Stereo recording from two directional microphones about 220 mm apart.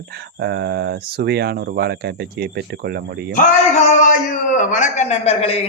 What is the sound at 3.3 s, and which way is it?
A man's voice, 35° left (ahead or behind).